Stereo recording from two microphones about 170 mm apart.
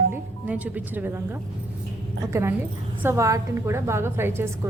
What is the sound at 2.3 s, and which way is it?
A woman's voice, 15° right (ahead or behind).